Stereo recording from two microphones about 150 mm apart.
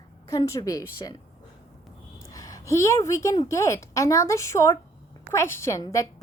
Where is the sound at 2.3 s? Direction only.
25° left (ahead or behind).